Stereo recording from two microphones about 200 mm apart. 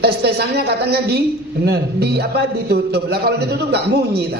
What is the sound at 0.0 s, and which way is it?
A man's voice, 50° right (ahead or behind).